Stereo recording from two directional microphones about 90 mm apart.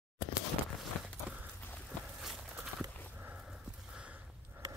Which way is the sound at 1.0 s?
15° right (ahead or behind).